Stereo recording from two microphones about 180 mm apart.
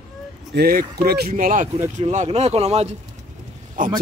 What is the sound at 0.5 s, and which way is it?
Speech, 55° right (ahead or behind).